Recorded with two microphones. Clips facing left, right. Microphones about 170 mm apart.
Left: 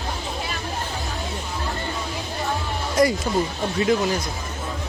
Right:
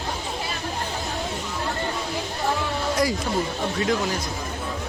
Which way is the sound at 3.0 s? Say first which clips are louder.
Left 6 dB; centre (ahead or behind).